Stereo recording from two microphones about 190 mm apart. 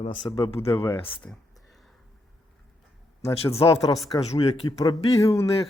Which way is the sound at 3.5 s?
15° left (ahead or behind).